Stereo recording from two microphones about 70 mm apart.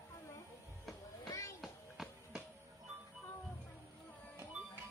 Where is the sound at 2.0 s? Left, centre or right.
Centre.